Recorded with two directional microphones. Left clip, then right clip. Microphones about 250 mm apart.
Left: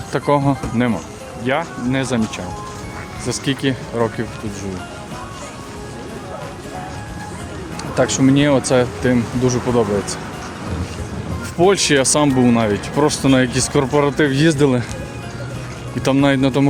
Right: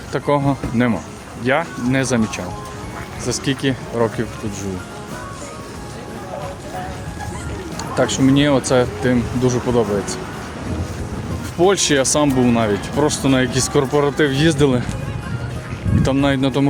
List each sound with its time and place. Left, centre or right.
0.1 s speech: centre
1.5 s speech: centre
7.8 s speech: centre
11.6 s speech: centre
16.0 s speech: centre